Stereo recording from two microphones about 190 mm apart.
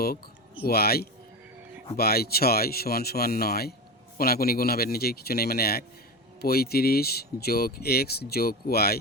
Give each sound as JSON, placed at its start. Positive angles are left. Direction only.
{"t": 0.6, "sound": "speech", "side_deg": 55}